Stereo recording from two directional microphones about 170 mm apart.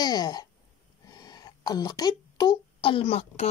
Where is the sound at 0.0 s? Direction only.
25° left (ahead or behind).